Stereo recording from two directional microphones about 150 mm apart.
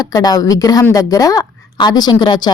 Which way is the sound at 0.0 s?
25° left (ahead or behind).